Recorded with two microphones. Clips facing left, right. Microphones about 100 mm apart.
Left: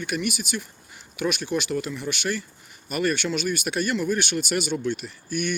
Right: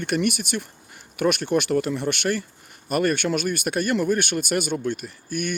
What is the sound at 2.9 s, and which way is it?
Speech, 45° right (ahead or behind).